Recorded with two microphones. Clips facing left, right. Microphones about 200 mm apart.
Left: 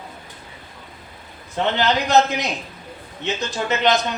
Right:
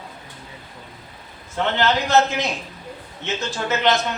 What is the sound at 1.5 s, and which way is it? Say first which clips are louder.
A man's voice: left 1 dB; 15° left (ahead or behind).